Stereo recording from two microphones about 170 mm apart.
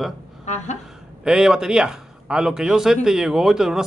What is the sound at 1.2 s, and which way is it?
Speech, 5° right (ahead or behind).